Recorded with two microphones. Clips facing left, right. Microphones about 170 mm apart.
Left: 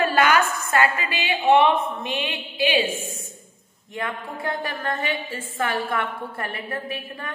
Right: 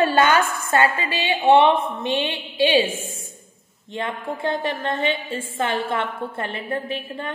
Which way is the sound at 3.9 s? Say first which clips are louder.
Right 3 dB; 25° right (ahead or behind).